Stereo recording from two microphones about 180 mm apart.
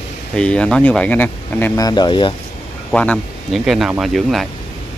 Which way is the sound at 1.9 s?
25° left (ahead or behind).